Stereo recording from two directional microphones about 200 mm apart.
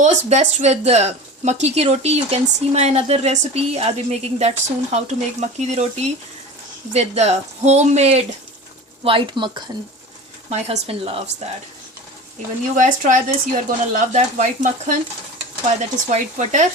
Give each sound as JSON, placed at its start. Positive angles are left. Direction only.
{"t": 0.0, "sound": "speech", "side_deg": -35}
{"t": 12.7, "sound": "speech", "side_deg": -40}
{"t": 16.0, "sound": "speech", "side_deg": -35}